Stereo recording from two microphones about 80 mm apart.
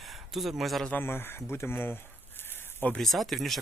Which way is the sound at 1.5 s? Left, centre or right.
Left.